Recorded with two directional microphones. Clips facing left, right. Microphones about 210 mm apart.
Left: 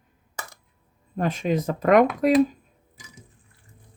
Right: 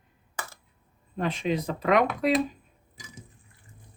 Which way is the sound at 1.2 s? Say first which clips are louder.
Left 3 dB; 45° left (ahead or behind).